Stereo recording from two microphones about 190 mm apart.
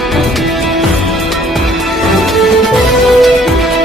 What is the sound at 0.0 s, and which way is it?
Music, centre (ahead or behind).